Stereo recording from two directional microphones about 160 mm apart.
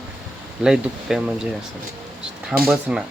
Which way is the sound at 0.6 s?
5° right (ahead or behind).